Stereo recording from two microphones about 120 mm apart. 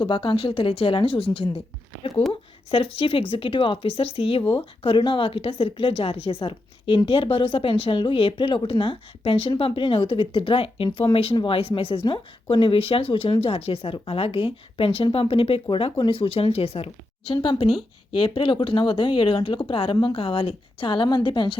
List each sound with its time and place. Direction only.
0.0 s a woman's voice: 45° left (ahead or behind)
2.6 s a woman's voice: 50° left (ahead or behind)